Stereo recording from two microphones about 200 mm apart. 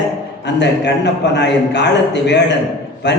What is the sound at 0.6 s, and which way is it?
A man's voice, 60° left (ahead or behind).